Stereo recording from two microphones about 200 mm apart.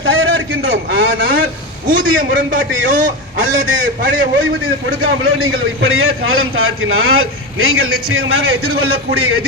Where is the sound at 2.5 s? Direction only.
40° right (ahead or behind).